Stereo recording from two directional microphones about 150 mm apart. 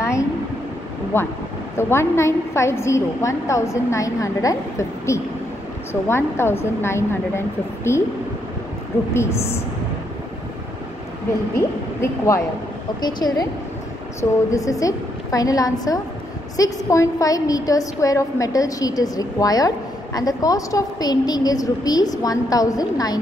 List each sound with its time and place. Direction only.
1.8 s a woman's voice: 15° left (ahead or behind)
9.1 s a woman's voice: 15° left (ahead or behind)
11.5 s a woman's voice: 20° left (ahead or behind)
14.5 s a woman's voice: 20° left (ahead or behind)